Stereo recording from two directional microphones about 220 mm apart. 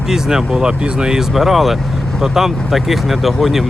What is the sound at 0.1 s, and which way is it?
Speech, 5° right (ahead or behind).